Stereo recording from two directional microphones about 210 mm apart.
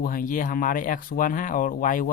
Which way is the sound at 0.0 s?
40° left (ahead or behind).